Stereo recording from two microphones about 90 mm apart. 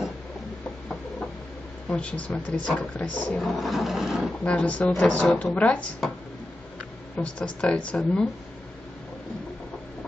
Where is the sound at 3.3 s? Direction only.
Centre (ahead or behind).